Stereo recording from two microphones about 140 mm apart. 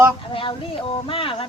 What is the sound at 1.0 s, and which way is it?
Speech, 40° left (ahead or behind).